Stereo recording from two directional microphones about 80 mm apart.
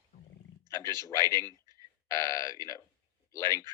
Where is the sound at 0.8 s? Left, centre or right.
Right.